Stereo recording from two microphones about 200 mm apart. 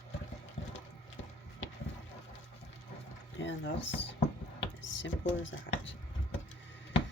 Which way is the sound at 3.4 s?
65° left (ahead or behind).